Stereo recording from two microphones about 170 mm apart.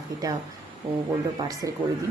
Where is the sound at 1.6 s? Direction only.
20° right (ahead or behind).